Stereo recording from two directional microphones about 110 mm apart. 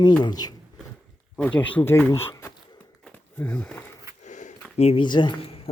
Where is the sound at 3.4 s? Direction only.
10° left (ahead or behind).